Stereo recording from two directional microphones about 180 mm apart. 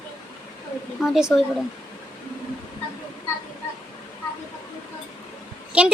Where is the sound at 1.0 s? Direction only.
Centre (ahead or behind).